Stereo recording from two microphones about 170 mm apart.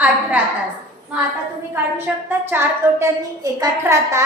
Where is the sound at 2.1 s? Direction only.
5° right (ahead or behind).